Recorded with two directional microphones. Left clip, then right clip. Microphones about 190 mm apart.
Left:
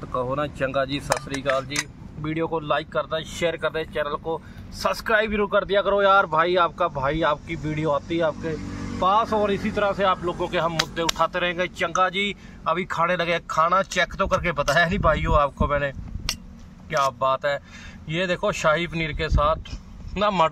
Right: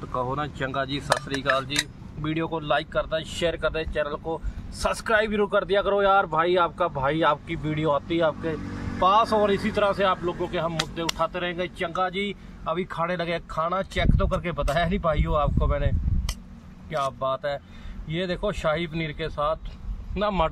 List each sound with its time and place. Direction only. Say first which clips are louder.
0.1 s speech: left 3 dB; 20° left (ahead or behind)
1.4 s speech: even; centre (ahead or behind)